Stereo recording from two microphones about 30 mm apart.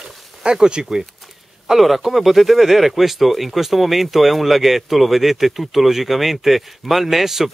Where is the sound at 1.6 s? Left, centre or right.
Centre.